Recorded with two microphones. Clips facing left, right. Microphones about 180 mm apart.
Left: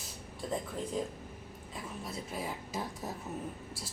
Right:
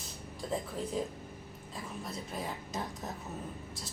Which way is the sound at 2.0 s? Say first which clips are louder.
Left 1 dB; 5° left (ahead or behind).